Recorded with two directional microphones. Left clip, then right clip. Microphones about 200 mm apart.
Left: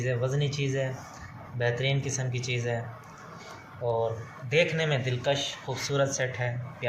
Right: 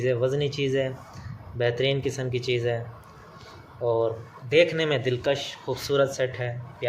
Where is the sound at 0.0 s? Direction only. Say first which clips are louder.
Right 6 dB; 55° right (ahead or behind).